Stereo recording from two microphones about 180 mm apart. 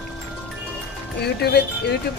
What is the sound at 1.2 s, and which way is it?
Speech, 65° left (ahead or behind).